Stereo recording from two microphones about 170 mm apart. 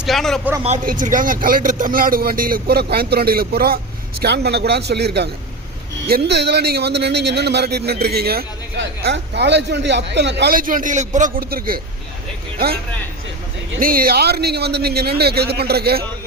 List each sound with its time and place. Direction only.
0.0 s a man's voice: centre (ahead or behind)
0.9 s speech: 50° right (ahead or behind)
4.2 s a man's voice: 75° right (ahead or behind)